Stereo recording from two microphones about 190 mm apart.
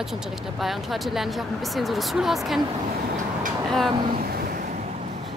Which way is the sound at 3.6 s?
Centre (ahead or behind).